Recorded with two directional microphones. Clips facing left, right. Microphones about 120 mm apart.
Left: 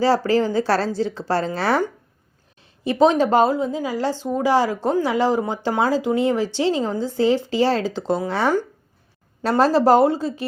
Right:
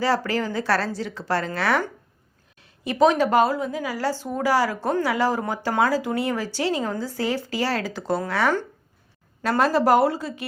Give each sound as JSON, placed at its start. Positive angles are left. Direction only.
{"t": 0.0, "sound": "a woman's voice", "side_deg": 30}